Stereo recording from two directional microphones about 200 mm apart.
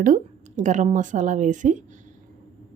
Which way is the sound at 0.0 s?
40° right (ahead or behind).